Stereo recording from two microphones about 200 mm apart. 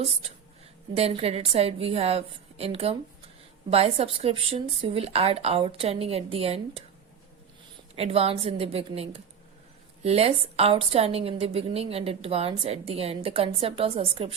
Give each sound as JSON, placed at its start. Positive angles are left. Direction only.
{"t": 0.9, "sound": "a woman's voice", "side_deg": -30}
{"t": 7.9, "sound": "a woman's voice", "side_deg": -30}